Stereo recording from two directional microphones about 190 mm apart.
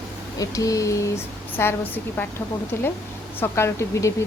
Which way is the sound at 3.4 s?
15° left (ahead or behind).